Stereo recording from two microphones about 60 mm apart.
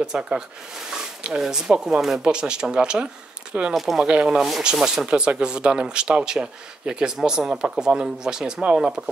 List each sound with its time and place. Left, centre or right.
0.0 s speech: centre
3.7 s speech: centre
4.1 s speech: centre
4.4 s speech: centre